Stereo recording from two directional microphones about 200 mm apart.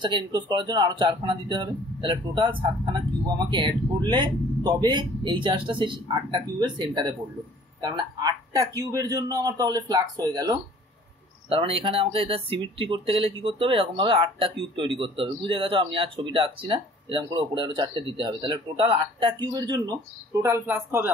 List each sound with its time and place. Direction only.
0.0 s speech: 20° right (ahead or behind)